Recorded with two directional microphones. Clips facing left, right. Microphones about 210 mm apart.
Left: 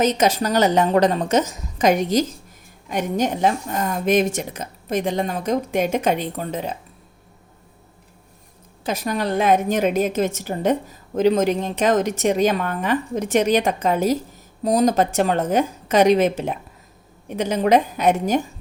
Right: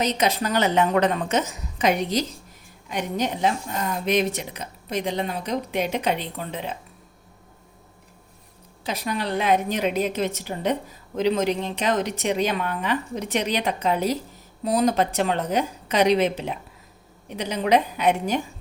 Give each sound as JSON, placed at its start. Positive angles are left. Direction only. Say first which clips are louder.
{"t": 0.0, "sound": "a woman's voice", "louder": "left 5 dB", "side_deg": 45}
{"t": 8.8, "sound": "a woman's voice", "louder": "left 4 dB", "side_deg": 45}